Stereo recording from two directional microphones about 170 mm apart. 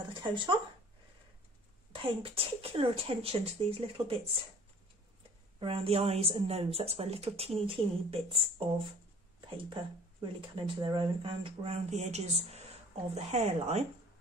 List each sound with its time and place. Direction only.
0.1 s speech: 30° right (ahead or behind)
1.9 s speech: 30° right (ahead or behind)
5.6 s speech: 35° right (ahead or behind)